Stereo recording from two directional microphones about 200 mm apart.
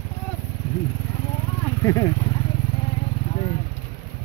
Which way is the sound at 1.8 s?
15° left (ahead or behind).